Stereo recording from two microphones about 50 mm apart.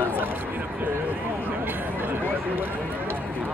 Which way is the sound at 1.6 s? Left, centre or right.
Right.